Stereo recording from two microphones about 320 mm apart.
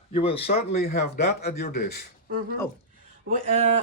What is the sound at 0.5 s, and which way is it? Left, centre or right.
A man's voice, left.